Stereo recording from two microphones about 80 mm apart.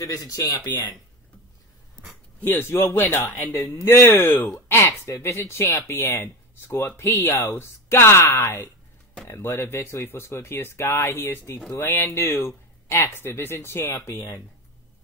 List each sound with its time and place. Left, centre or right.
0.0 s speech: left
2.4 s a man's voice: left
4.6 s a sound: left
5.0 s speech: left